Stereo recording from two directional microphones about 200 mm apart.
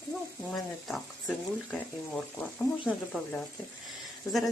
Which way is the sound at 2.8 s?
5° left (ahead or behind).